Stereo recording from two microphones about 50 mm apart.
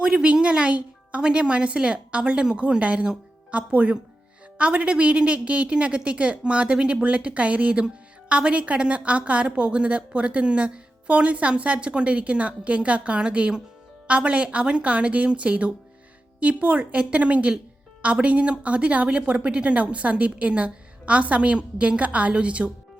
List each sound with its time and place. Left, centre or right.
0.0 s a woman's voice: centre